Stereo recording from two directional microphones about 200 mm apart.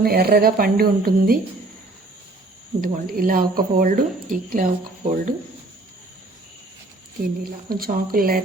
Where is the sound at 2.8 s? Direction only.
45° right (ahead or behind).